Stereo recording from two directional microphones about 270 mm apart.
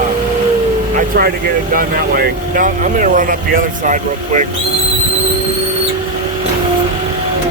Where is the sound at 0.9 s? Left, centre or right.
Right.